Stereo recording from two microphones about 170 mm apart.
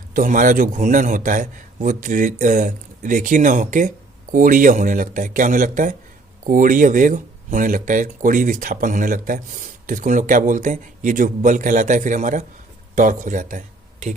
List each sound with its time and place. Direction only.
0.1 s speech: 50° right (ahead or behind)